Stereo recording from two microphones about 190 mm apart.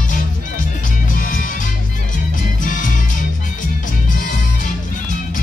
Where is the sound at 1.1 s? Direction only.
45° left (ahead or behind).